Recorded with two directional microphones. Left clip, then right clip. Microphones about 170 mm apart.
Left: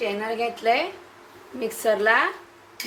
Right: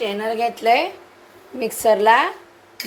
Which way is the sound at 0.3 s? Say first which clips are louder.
Right 7 dB; 35° right (ahead or behind).